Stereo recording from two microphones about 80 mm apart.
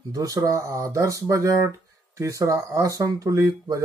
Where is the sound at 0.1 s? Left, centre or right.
Right.